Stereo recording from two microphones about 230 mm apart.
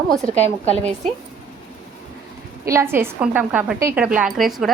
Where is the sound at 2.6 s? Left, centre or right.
Centre.